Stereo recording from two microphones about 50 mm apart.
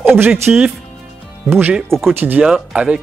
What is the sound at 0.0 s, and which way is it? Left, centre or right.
Music, right.